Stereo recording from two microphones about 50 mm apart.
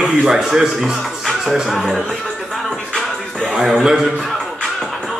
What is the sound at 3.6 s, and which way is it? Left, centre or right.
Speech, centre.